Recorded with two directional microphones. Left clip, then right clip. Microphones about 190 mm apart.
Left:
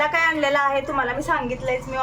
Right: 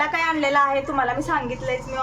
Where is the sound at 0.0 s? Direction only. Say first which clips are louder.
Left 2 dB; centre (ahead or behind).